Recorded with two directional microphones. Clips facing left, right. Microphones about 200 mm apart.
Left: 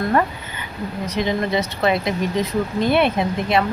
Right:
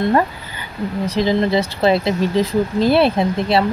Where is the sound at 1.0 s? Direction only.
30° right (ahead or behind).